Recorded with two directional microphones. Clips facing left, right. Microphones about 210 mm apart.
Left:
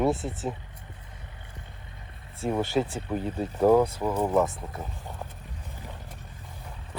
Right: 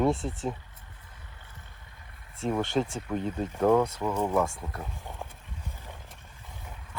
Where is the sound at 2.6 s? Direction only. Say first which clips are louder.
Left 2 dB; 5° left (ahead or behind).